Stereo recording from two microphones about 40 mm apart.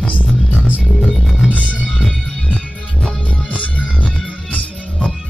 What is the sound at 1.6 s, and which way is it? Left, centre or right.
Music, left.